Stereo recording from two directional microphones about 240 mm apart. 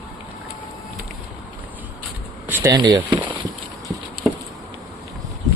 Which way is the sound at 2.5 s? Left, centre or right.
Centre.